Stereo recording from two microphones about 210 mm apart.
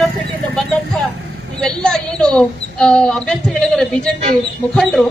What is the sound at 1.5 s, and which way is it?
A woman's voice, 5° left (ahead or behind).